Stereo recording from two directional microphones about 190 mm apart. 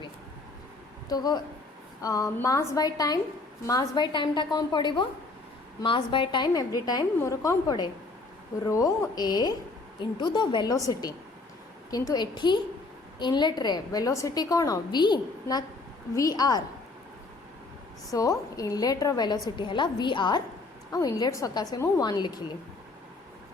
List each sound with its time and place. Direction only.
1.0 s a woman's voice: 20° left (ahead or behind)
18.1 s a woman's voice: 15° left (ahead or behind)